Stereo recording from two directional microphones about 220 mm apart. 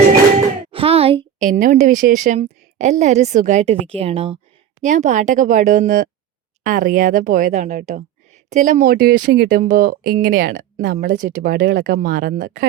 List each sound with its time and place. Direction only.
0.7 s a woman's voice: 25° right (ahead or behind)